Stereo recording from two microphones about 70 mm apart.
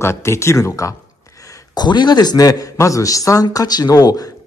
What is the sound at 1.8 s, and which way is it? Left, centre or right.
Speech, left.